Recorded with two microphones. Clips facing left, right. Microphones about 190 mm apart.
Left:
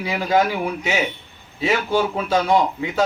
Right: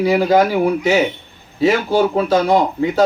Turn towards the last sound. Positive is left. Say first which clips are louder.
# right 4 dB
turn(degrees=-35)  # may be behind; listen again after turning